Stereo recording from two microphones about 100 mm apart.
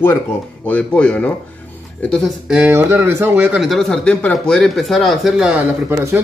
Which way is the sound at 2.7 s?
25° right (ahead or behind).